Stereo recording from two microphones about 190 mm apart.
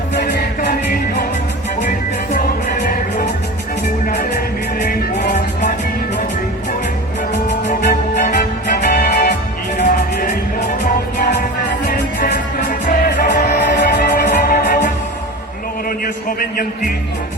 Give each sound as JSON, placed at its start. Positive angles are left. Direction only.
{"t": 0.1, "sound": "music", "side_deg": 60}
{"t": 4.0, "sound": "music", "side_deg": 45}
{"t": 7.7, "sound": "music", "side_deg": 45}
{"t": 16.4, "sound": "speech", "side_deg": 50}